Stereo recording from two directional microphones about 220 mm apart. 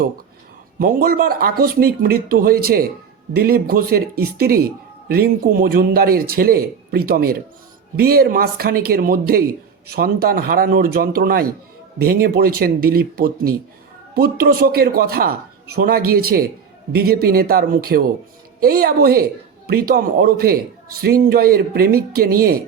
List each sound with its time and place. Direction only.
0.8 s speech: 40° right (ahead or behind)